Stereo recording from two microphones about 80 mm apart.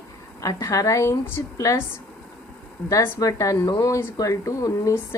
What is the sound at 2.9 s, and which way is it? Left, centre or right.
A woman's voice, left.